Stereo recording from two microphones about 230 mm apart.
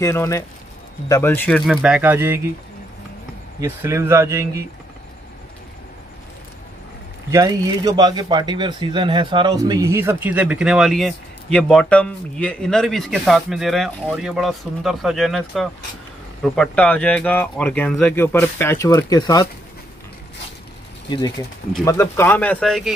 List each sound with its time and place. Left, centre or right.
0.0 s speech: centre
1.7 s speech: centre
3.6 s speech: centre
7.2 s speech: centre
21.8 s speech: centre